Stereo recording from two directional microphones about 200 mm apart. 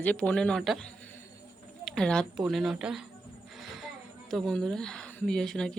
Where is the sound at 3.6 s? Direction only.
Centre (ahead or behind).